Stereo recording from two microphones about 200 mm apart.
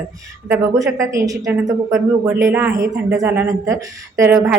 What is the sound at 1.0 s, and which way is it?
A woman's voice, 15° right (ahead or behind).